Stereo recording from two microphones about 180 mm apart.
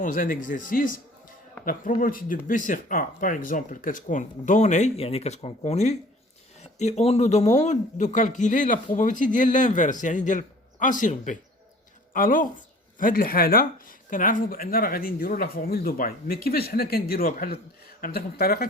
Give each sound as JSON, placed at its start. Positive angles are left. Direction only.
{"t": 0.0, "sound": "speech", "side_deg": 50}